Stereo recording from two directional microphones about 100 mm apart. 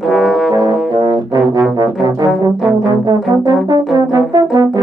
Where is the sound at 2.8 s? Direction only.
40° right (ahead or behind).